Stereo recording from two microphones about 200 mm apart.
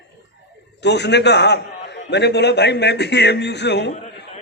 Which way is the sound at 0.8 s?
60° left (ahead or behind).